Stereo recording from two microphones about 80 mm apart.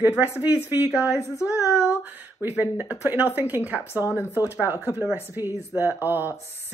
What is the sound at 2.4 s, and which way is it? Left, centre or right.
Speech, right.